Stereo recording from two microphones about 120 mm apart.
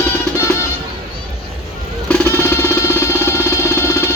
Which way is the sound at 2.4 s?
20° left (ahead or behind).